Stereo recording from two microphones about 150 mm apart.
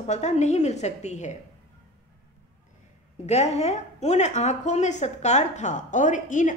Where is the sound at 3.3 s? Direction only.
45° left (ahead or behind).